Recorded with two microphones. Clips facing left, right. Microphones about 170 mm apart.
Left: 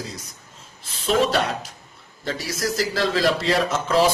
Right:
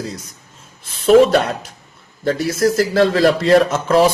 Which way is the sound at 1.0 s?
55° right (ahead or behind).